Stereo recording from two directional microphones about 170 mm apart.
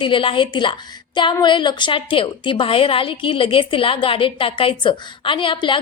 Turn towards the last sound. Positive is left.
turn(degrees=30)  # may be behind; listen again after turning